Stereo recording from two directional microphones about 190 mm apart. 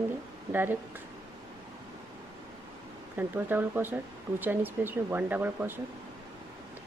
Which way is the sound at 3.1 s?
10° right (ahead or behind).